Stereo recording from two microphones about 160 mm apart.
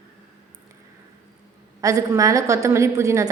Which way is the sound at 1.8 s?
20° right (ahead or behind).